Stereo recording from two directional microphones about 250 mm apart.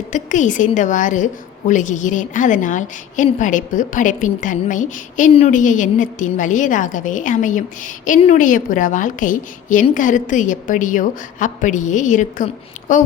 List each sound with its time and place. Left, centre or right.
0.1 s a woman's voice: left